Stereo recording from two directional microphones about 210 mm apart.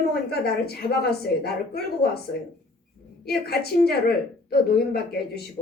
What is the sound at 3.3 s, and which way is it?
A woman's voice, 50° left (ahead or behind).